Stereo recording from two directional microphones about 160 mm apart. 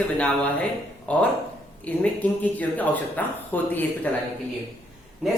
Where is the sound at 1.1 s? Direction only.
10° left (ahead or behind).